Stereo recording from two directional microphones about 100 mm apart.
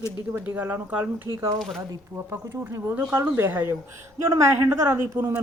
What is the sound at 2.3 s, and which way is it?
A woman's voice, 25° right (ahead or behind).